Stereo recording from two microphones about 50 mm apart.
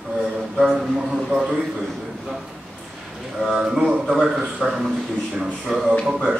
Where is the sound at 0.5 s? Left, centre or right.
Centre.